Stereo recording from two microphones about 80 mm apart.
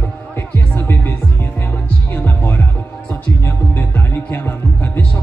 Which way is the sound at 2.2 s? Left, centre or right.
Left.